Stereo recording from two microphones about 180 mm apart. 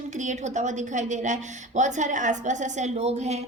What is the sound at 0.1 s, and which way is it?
A woman's voice, 40° right (ahead or behind).